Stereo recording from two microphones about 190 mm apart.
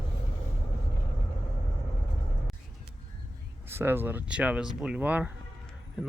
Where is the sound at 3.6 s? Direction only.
10° right (ahead or behind).